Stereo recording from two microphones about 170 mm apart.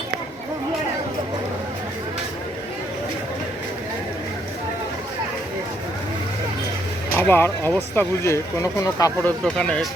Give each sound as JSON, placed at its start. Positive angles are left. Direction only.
{"t": 7.2, "sound": "speech", "side_deg": 15}
{"t": 9.4, "sound": "speech", "side_deg": 5}